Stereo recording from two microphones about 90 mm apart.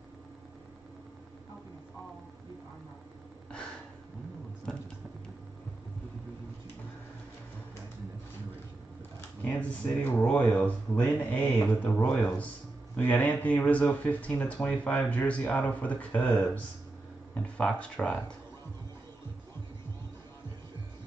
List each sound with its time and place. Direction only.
4.7 s music: 10° left (ahead or behind)
9.4 s speech: 20° left (ahead or behind)